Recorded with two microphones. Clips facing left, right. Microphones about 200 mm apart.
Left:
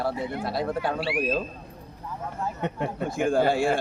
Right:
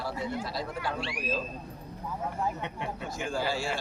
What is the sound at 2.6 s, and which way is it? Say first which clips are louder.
Speech: left 7 dB; 50° left (ahead or behind).